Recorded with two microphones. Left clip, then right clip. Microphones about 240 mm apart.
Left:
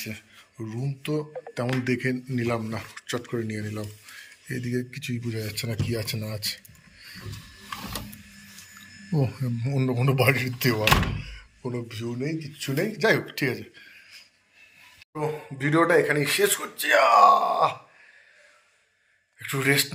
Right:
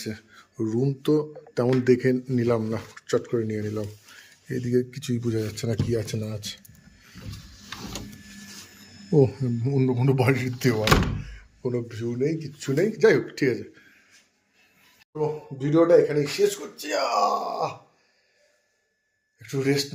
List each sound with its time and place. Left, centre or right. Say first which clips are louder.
0.0 s speech: right 1 dB; right
9.2 s speech: right 7 dB; centre
15.2 s speech: right 1 dB; centre
19.4 s speech: left 2 dB; centre